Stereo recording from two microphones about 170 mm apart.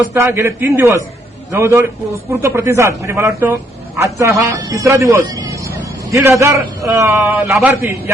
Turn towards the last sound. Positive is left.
turn(degrees=-5)  # may be behind; listen again after turning